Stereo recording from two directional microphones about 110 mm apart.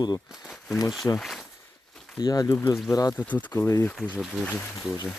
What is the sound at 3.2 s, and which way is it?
Speech, 15° left (ahead or behind).